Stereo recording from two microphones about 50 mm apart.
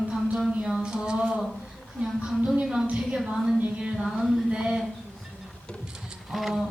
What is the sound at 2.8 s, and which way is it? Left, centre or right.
Speech, right.